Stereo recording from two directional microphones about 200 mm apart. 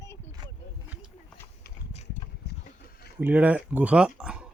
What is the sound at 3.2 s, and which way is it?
Speech, 10° right (ahead or behind).